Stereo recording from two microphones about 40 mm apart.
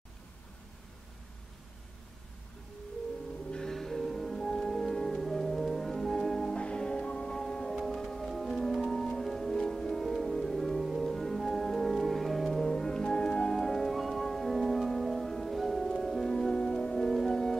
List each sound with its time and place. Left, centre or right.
3.7 s music: centre
6.5 s music: left
7.7 s music: centre
16.3 s music: centre